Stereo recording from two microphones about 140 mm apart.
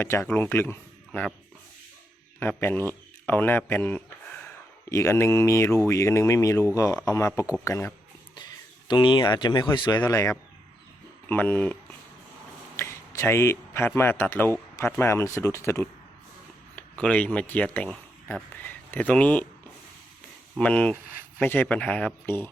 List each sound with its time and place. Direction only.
0.0 s a man's voice: 20° left (ahead or behind)
2.4 s a man's voice: 15° left (ahead or behind)
8.9 s speech: 35° left (ahead or behind)
10.0 s speech: 20° left (ahead or behind)
17.0 s speech: 10° left (ahead or behind)
20.6 s speech: 10° left (ahead or behind)